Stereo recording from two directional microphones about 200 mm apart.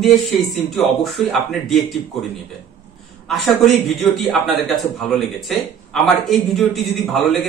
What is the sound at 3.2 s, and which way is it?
A man's voice, centre (ahead or behind).